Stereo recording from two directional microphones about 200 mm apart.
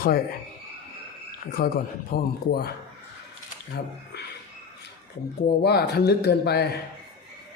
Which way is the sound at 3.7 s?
55° left (ahead or behind).